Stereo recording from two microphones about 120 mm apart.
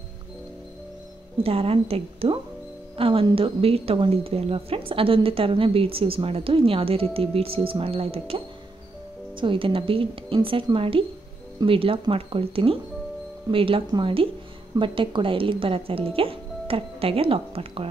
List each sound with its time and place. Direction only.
1.4 s a woman's voice: 55° right (ahead or behind)
9.4 s a woman's voice: 45° right (ahead or behind)